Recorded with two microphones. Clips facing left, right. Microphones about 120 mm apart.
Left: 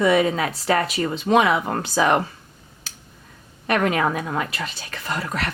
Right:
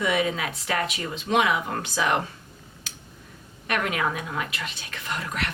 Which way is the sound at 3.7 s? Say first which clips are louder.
Left 6 dB; 35° left (ahead or behind).